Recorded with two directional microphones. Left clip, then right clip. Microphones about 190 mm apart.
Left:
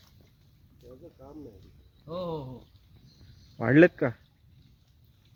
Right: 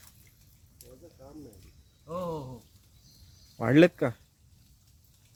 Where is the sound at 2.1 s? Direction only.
15° right (ahead or behind).